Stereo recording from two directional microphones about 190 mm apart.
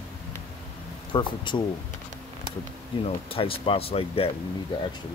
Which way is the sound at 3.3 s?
30° left (ahead or behind).